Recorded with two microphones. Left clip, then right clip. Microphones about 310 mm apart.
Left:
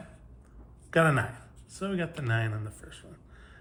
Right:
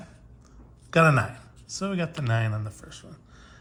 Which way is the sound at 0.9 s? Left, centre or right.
Centre.